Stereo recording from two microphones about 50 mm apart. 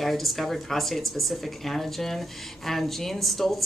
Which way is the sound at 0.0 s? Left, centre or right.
Centre.